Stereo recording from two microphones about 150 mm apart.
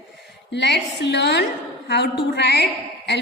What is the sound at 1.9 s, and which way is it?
Speech, 90° left.